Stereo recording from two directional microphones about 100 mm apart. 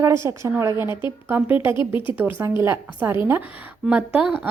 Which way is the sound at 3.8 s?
10° right (ahead or behind).